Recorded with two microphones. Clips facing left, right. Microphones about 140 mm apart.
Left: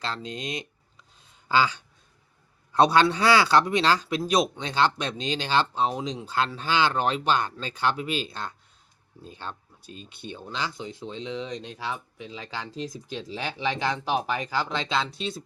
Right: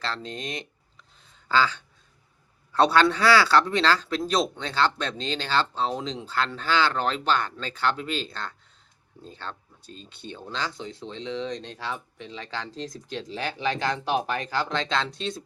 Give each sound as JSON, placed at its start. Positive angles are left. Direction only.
{"t": 0.0, "sound": "speech", "side_deg": 15}